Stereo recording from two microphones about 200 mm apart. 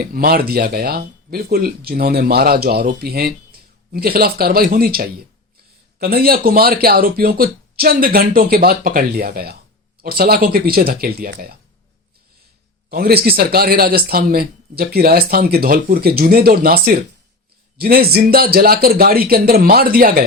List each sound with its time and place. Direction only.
0.0 s speech: 45° right (ahead or behind)
12.9 s speech: 50° right (ahead or behind)